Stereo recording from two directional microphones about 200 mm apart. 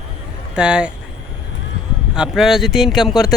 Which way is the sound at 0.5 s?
5° right (ahead or behind).